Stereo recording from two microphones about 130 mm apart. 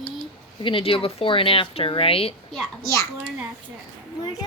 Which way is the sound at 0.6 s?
40° left (ahead or behind).